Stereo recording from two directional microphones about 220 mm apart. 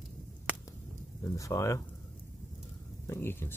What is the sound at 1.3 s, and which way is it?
Speech, 15° left (ahead or behind).